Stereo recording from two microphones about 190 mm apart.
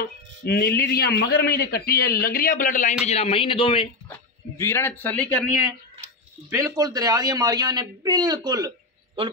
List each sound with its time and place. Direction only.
0.5 s a man's voice: 55° left (ahead or behind)
3.1 s a man's voice: 30° left (ahead or behind)
4.6 s speech: 15° left (ahead or behind)
6.5 s speech: 15° right (ahead or behind)